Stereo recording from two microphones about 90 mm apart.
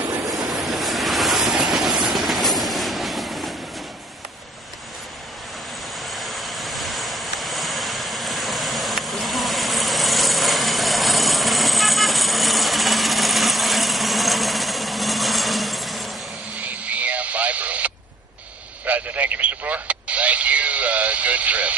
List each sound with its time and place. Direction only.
0.2 s vehicle: 40° right (ahead or behind)
0.5 s train: centre (ahead or behind)
6.0 s vehicle: centre (ahead or behind)
16.5 s radio: 15° right (ahead or behind)